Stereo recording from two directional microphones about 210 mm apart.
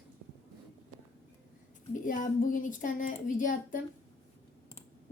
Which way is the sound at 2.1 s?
40° left (ahead or behind).